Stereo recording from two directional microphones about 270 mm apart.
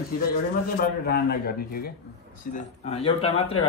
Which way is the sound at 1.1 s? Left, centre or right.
Left.